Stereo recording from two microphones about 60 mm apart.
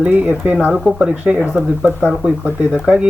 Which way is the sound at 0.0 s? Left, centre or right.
Right.